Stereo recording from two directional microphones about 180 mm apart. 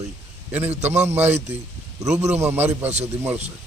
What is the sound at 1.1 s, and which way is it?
Speech, 10° right (ahead or behind).